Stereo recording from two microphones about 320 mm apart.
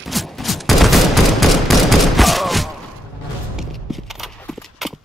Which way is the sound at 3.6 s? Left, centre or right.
Centre.